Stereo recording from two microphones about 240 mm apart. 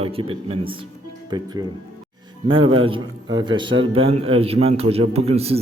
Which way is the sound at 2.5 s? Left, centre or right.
Right.